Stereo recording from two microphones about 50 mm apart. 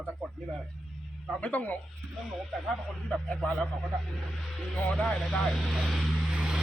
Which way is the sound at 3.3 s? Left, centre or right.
Centre.